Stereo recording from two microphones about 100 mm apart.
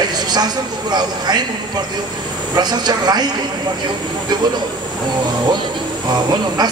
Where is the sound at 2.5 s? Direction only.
45° right (ahead or behind).